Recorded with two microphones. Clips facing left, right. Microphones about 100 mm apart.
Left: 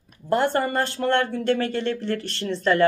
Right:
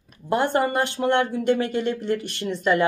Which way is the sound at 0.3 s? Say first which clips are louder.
Even; 15° right (ahead or behind).